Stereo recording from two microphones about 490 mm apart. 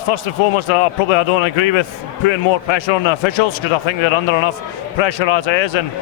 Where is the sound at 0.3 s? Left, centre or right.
Left.